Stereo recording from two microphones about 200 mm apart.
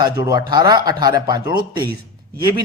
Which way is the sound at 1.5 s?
50° right (ahead or behind).